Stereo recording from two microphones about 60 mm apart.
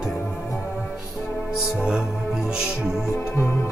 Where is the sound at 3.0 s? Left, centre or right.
Left.